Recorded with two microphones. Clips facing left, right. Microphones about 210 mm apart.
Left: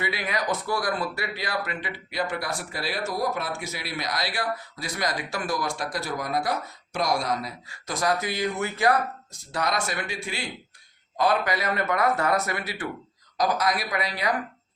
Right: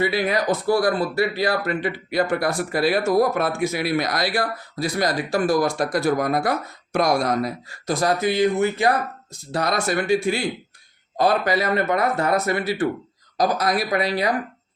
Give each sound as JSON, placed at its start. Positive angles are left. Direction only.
{"t": 0.0, "sound": "speech", "side_deg": -35}
{"t": 7.9, "sound": "speech", "side_deg": -30}
{"t": 11.2, "sound": "speech", "side_deg": -35}